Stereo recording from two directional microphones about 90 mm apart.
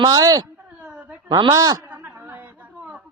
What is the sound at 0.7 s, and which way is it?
Speech, 15° right (ahead or behind).